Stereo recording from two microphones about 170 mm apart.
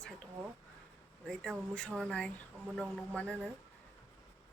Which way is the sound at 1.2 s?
5° left (ahead or behind).